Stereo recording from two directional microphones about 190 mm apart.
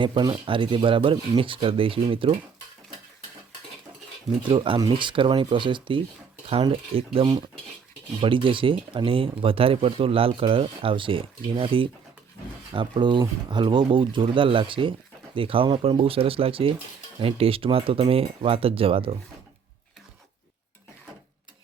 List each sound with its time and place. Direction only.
0.0 s speech: 25° right (ahead or behind)
4.4 s speech: 25° right (ahead or behind)